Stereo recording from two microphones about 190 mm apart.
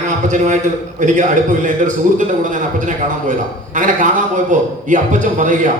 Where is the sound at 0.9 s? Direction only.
40° right (ahead or behind).